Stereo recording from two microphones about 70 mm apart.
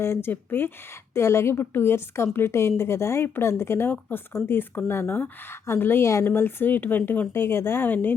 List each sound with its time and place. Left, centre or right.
0.0 s a woman's voice: left
6.2 s a woman's voice: left